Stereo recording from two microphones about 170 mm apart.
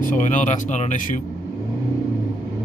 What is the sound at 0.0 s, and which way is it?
Speech, 50° left (ahead or behind).